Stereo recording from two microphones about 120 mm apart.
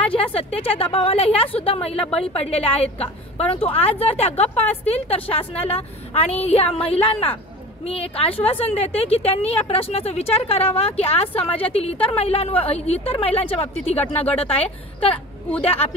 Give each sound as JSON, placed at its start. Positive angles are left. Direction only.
{"t": 0.2, "sound": "a woman's voice", "side_deg": 55}